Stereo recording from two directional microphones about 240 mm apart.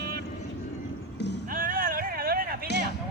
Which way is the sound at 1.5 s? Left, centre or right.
Right.